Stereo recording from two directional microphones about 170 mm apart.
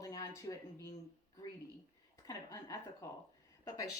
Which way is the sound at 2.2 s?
20° left (ahead or behind).